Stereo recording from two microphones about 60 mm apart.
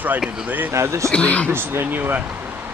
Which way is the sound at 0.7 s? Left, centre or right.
Right.